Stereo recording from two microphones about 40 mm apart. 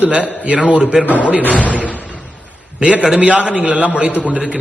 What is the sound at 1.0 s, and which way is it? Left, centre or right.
Speech, left.